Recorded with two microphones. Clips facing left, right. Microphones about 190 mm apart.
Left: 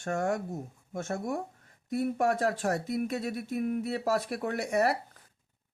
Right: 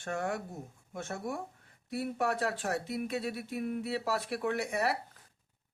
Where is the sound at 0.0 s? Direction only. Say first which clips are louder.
Left 5 dB; 45° left (ahead or behind).